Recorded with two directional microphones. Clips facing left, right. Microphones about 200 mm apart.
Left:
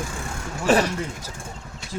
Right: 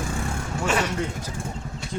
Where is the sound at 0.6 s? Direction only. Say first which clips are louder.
Left 6 dB; 35° left (ahead or behind).